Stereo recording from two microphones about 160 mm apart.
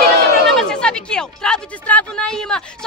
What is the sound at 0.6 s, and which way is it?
Speech, 5° left (ahead or behind).